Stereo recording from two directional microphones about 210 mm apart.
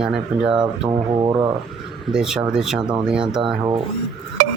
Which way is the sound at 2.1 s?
5° right (ahead or behind).